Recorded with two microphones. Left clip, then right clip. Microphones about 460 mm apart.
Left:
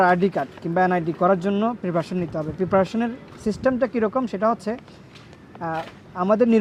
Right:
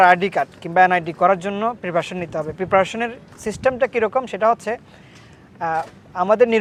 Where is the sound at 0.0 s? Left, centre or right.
Right.